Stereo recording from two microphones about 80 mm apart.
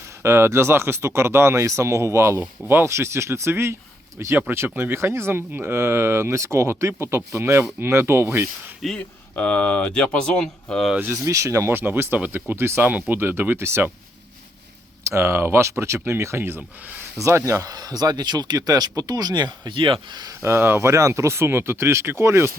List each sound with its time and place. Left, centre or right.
0.2 s speech: right
8.8 s speech: centre
9.3 s speech: centre
11.1 s speech: right
11.7 s speech: right
15.0 s speech: right
20.4 s speech: right